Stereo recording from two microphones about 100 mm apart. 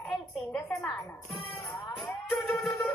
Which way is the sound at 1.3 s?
75° left (ahead or behind).